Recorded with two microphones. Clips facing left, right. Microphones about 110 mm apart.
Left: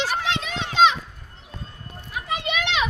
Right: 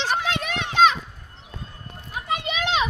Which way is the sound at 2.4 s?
35° right (ahead or behind).